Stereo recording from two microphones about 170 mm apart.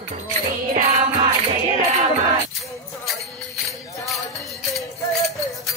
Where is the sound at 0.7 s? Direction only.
50° right (ahead or behind).